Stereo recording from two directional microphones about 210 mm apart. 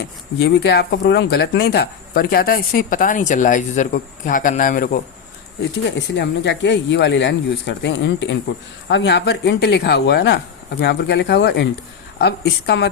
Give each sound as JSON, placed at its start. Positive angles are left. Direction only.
{"t": 0.0, "sound": "speech", "side_deg": 55}
{"t": 6.0, "sound": "speech", "side_deg": 55}